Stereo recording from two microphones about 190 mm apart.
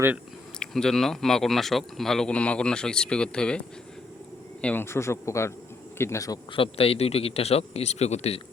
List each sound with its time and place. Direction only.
0.6 s speech: 5° left (ahead or behind)
4.6 s speech: 10° left (ahead or behind)
6.7 s a man's voice: 30° left (ahead or behind)